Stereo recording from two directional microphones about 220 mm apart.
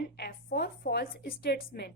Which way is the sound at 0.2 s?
45° left (ahead or behind).